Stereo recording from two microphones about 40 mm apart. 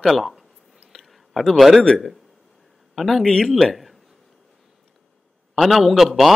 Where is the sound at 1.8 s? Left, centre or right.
Centre.